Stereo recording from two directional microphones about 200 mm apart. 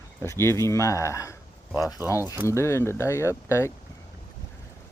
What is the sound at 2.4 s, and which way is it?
Speech, 15° left (ahead or behind).